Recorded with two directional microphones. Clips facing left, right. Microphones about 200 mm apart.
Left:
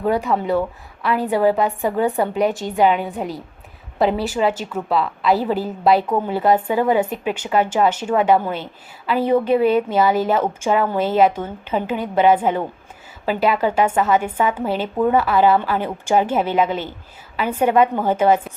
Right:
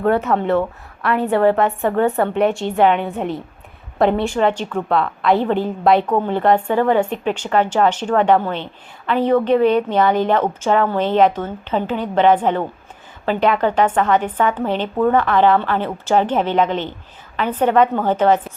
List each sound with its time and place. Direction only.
0.0 s a woman's voice: 5° left (ahead or behind)
2.0 s a woman's voice: 15° left (ahead or behind)
2.3 s a woman's voice: centre (ahead or behind)